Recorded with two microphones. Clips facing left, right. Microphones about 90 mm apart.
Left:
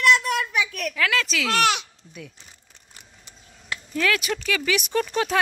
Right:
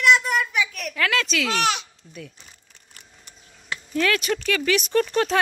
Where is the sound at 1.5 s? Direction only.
65° left (ahead or behind).